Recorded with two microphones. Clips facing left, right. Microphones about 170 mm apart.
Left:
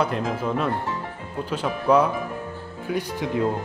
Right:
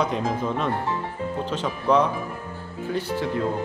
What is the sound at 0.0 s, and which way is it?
A man's voice, 5° left (ahead or behind).